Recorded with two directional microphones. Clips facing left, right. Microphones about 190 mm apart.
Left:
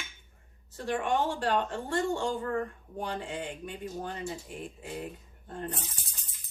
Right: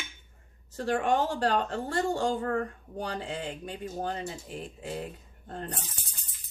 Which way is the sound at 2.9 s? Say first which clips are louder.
Right 1 dB; 35° right (ahead or behind).